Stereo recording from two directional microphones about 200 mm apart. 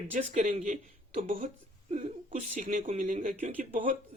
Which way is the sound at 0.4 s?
40° right (ahead or behind).